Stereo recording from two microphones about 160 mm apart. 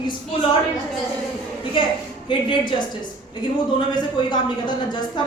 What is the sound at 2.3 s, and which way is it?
Speech, 30° left (ahead or behind).